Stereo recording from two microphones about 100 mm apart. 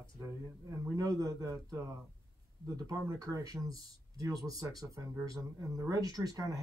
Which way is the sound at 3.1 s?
35° right (ahead or behind).